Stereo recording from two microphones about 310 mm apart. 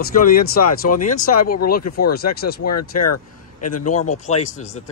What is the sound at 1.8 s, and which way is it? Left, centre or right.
Speech, left.